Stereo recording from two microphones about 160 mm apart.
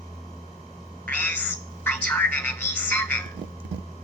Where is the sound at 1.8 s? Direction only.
10° left (ahead or behind).